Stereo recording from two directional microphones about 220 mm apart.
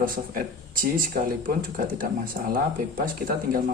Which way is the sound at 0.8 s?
40° right (ahead or behind).